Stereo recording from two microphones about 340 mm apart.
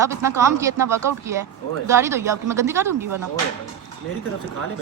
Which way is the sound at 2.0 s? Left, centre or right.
Centre.